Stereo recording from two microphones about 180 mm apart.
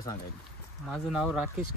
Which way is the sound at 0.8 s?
Centre (ahead or behind).